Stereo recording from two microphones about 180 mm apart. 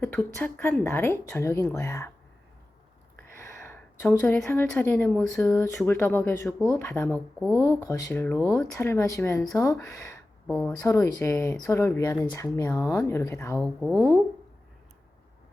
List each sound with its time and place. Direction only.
0.0 s speech: 10° left (ahead or behind)
3.3 s a sound: 15° left (ahead or behind)
4.2 s speech: 15° left (ahead or behind)
5.5 s speech: 15° left (ahead or behind)
7.3 s speech: 5° right (ahead or behind)
7.6 s speech: 15° left (ahead or behind)
10.5 s speech: 5° left (ahead or behind)
10.8 s speech: 15° left (ahead or behind)
13.6 s speech: 15° right (ahead or behind)